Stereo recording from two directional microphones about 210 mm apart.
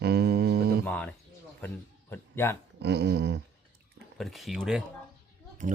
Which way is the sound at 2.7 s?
50° right (ahead or behind).